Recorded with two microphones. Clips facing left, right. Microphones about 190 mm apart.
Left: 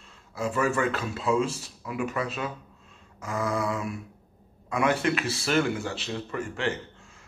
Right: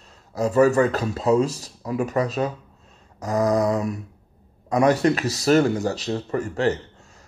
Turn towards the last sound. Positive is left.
turn(degrees=-40)  # may be behind; listen again after turning